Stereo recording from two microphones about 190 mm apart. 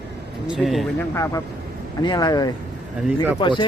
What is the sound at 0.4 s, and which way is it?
Speech, centre (ahead or behind).